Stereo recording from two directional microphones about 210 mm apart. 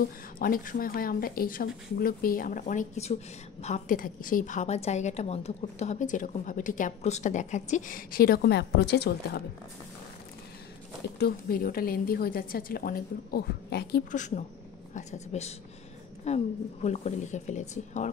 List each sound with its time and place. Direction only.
0.4 s a woman's voice: 40° left (ahead or behind)
11.1 s a woman's voice: 45° left (ahead or behind)
14.1 s a woman's voice: 35° left (ahead or behind)